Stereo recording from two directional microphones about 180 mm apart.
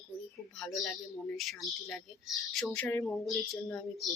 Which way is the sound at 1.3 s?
Centre (ahead or behind).